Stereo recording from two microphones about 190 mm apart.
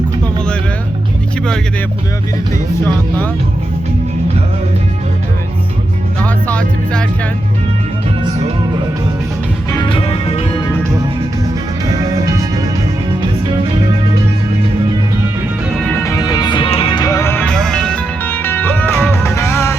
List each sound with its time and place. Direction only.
6.2 s music: 5° left (ahead or behind)
9.7 s music: 25° left (ahead or behind)
12.2 s music: 15° right (ahead or behind)
15.9 s music: 15° left (ahead or behind)